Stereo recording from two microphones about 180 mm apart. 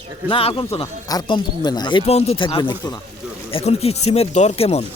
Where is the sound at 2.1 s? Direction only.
35° left (ahead or behind).